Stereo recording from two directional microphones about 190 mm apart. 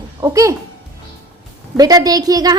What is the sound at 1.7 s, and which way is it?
Speech, 20° right (ahead or behind).